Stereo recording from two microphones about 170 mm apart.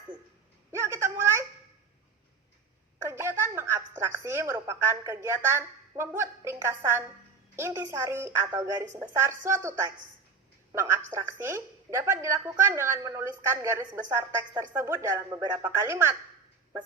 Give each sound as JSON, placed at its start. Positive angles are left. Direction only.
{"t": 0.7, "sound": "a sound", "side_deg": -15}
{"t": 3.0, "sound": "a woman's voice", "side_deg": -15}
{"t": 10.7, "sound": "a woman's voice", "side_deg": -15}